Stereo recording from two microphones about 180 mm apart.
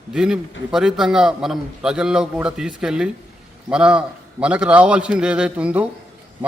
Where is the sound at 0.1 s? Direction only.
5° right (ahead or behind).